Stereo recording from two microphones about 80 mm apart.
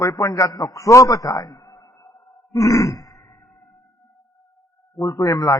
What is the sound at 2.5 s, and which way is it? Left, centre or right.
Grunt, left.